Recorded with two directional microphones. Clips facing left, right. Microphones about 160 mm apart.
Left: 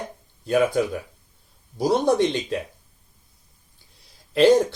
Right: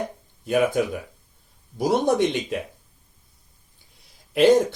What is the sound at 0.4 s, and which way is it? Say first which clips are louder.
Speech: left 1 dB; 15° right (ahead or behind).